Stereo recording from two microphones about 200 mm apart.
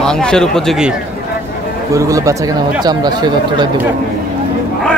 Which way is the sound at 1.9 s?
15° right (ahead or behind).